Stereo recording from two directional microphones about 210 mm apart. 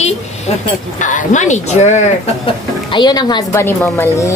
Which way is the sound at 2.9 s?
20° left (ahead or behind).